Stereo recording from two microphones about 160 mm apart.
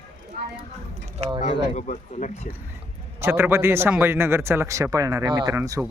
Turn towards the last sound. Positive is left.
turn(degrees=-20)  # may be behind; listen again after turning